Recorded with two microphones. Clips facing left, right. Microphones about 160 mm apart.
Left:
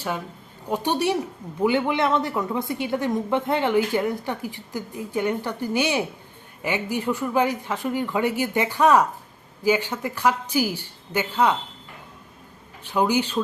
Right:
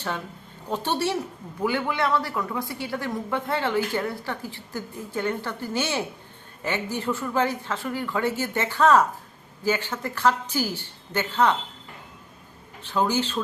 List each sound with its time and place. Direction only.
0.7 s speech: 15° left (ahead or behind)
12.8 s speech: 15° left (ahead or behind)